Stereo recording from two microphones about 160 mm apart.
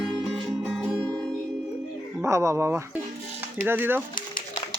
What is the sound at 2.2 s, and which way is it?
Speech, 20° right (ahead or behind).